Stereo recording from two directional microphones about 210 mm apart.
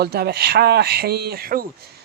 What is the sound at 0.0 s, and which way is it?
A man's voice, 50° right (ahead or behind).